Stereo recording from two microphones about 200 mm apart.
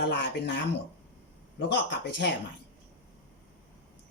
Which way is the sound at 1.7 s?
60° left (ahead or behind).